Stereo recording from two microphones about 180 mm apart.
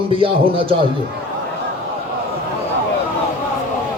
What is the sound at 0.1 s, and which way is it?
Speech, 30° right (ahead or behind).